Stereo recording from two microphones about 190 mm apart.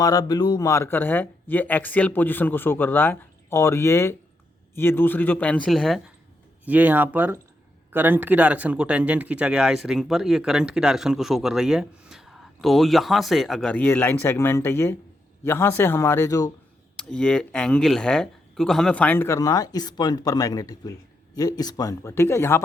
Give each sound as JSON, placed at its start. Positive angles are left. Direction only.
{"t": 0.0, "sound": "speech", "side_deg": 20}
{"t": 17.0, "sound": "speech", "side_deg": 5}